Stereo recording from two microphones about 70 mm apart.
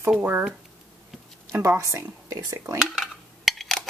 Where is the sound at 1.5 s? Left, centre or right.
Right.